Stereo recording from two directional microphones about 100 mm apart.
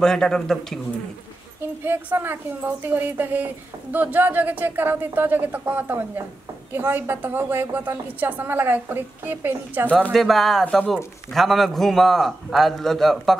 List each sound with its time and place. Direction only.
0.0 s a man's voice: 5° left (ahead or behind)
1.9 s a woman's voice: 20° right (ahead or behind)
9.8 s speech: 15° left (ahead or behind)
10.1 s a man's voice: centre (ahead or behind)